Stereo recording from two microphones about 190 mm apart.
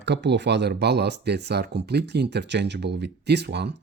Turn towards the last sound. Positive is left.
turn(degrees=-60)  # may be behind; listen again after turning